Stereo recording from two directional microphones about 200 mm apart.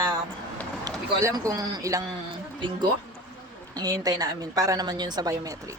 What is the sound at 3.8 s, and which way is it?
A woman's voice, 20° right (ahead or behind).